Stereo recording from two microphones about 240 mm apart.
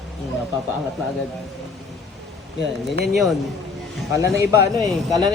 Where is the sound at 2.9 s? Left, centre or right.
Right.